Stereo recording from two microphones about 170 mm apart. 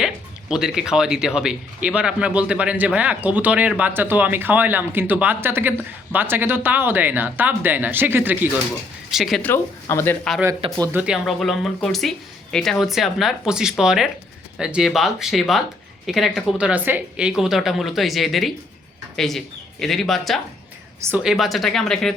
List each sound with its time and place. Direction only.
0.0 s speech: 5° right (ahead or behind)
9.4 s speech: 15° left (ahead or behind)
10.9 s speech: 5° right (ahead or behind)